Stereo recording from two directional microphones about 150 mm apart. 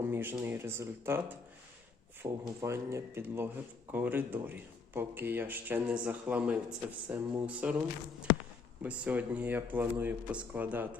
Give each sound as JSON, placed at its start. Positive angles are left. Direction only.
{"t": 0.0, "sound": "a man's voice", "side_deg": -15}
{"t": 8.8, "sound": "a man's voice", "side_deg": -10}